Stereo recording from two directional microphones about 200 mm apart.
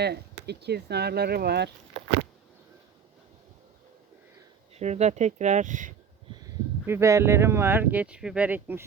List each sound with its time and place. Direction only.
0.0 s speech: 55° right (ahead or behind)
4.7 s speech: 35° right (ahead or behind)
6.8 s speech: 15° right (ahead or behind)